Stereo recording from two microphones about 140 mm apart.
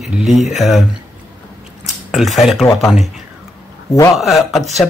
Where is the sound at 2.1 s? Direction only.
Centre (ahead or behind).